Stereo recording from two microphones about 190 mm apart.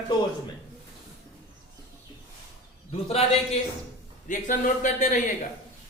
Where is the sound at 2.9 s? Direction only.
35° left (ahead or behind).